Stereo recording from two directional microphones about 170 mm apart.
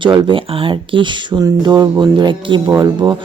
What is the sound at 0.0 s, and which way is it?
Speech, 30° right (ahead or behind).